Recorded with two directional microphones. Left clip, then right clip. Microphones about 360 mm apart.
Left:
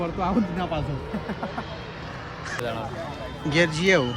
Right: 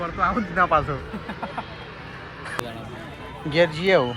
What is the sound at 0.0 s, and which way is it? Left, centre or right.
Speech, centre.